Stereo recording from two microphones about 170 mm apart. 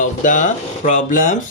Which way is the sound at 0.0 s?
50° left (ahead or behind).